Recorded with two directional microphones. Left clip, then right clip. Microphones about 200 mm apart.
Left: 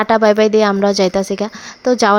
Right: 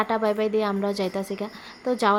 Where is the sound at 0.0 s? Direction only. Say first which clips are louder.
Left 12 dB; 40° left (ahead or behind).